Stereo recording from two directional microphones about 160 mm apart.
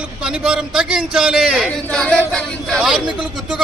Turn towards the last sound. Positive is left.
turn(degrees=-5)  # may be behind; listen again after turning